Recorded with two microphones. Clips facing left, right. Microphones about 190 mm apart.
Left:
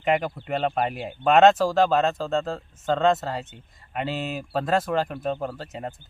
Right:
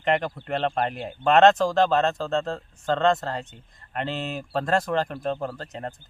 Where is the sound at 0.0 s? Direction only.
5° left (ahead or behind).